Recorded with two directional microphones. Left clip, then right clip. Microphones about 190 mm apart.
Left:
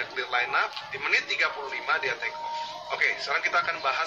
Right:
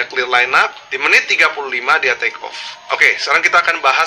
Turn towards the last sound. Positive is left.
turn(degrees=-45)  # may be behind; listen again after turning